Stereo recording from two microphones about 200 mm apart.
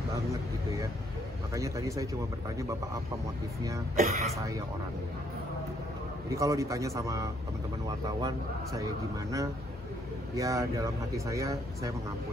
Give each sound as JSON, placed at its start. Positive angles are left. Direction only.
{"t": 1.5, "sound": "speech", "side_deg": -15}
{"t": 3.9, "sound": "speech", "side_deg": -35}
{"t": 6.3, "sound": "speech", "side_deg": -15}